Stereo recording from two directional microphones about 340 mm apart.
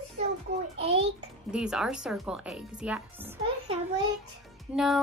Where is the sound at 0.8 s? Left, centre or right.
Centre.